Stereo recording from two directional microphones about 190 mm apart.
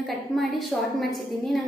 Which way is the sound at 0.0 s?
Centre (ahead or behind).